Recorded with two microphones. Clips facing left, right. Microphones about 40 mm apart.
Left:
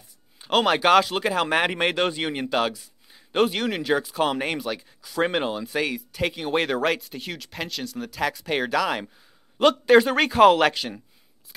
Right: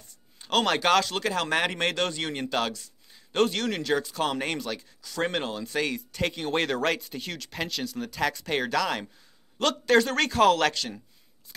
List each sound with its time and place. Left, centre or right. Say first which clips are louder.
0.4 s a man's voice: left 4 dB; centre